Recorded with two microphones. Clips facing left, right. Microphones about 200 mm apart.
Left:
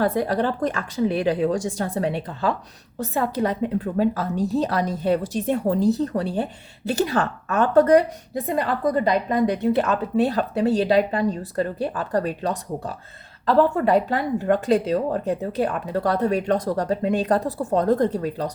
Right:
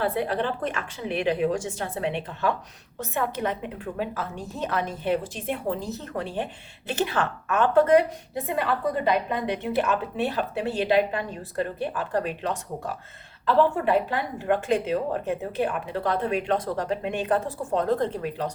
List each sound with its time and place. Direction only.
0.0 s speech: 40° left (ahead or behind)